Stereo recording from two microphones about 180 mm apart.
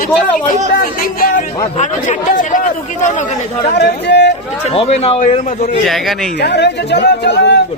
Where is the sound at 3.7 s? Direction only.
70° left (ahead or behind).